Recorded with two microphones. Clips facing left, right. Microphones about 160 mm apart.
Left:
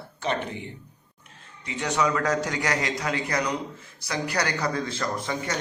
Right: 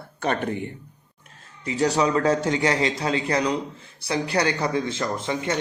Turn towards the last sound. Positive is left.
turn(degrees=-25)  # may be behind; listen again after turning